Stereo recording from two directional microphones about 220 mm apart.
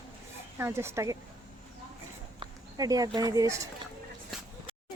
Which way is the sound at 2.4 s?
15° right (ahead or behind).